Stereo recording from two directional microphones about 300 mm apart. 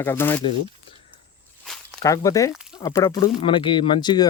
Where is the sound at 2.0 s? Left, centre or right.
Centre.